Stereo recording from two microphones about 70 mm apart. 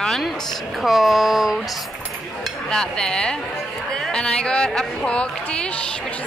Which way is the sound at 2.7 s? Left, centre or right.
Centre.